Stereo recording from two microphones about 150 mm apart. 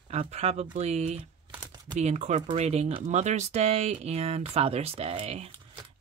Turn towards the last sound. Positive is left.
turn(degrees=-40)  # may be behind; listen again after turning